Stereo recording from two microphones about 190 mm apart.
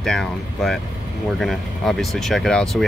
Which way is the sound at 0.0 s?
Centre (ahead or behind).